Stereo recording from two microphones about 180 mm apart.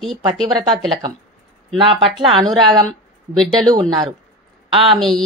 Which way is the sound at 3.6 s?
20° right (ahead or behind).